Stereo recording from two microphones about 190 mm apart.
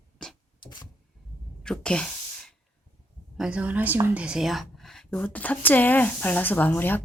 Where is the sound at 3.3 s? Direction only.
5° right (ahead or behind).